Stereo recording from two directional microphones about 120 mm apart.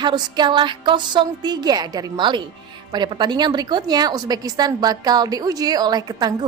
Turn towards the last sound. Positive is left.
turn(degrees=-35)  # may be behind; listen again after turning